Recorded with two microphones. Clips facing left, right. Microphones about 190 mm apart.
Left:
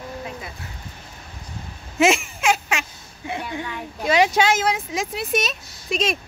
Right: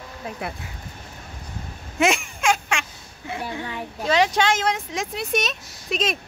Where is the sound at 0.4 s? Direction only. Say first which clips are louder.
Right 6 dB; 65° right (ahead or behind).